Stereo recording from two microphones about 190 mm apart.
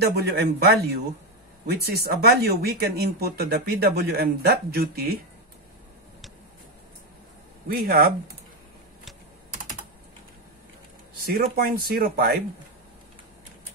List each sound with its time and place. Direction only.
0.0 s speech: 55° right (ahead or behind)
7.6 s speech: 50° right (ahead or behind)
11.2 s speech: 50° right (ahead or behind)